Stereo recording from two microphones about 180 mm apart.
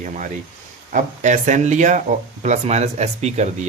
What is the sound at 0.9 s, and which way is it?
Speech, 45° right (ahead or behind).